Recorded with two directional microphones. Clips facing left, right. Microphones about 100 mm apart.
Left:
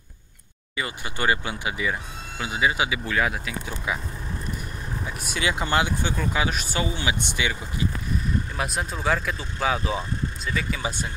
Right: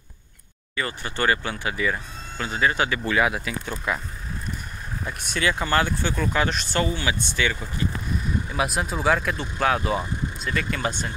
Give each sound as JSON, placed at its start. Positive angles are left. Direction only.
{"t": 0.7, "sound": "speech", "side_deg": 15}
{"t": 5.0, "sound": "speech", "side_deg": 5}
{"t": 5.4, "sound": "speech", "side_deg": 20}
{"t": 8.5, "sound": "speech", "side_deg": -5}